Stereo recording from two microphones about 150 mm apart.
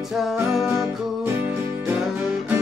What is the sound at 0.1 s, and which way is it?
Music, centre (ahead or behind).